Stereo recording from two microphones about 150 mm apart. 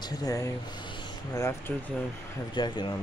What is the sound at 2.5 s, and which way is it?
Speech, 30° left (ahead or behind).